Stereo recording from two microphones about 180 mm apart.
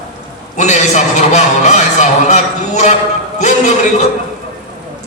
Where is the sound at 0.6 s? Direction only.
40° left (ahead or behind).